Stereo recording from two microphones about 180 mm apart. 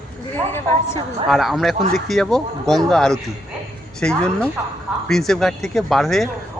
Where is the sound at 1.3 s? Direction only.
Centre (ahead or behind).